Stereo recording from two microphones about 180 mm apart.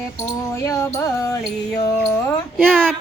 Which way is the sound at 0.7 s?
15° left (ahead or behind).